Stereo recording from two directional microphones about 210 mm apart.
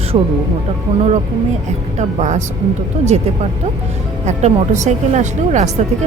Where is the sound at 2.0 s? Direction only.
35° right (ahead or behind).